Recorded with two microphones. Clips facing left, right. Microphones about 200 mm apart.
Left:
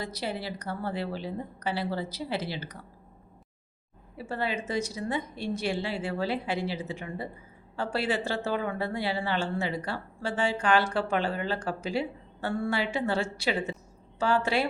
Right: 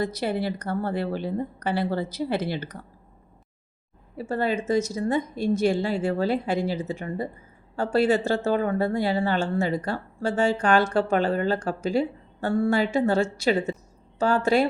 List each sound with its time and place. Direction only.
0.0 s speech: 50° right (ahead or behind)
4.2 s speech: 45° right (ahead or behind)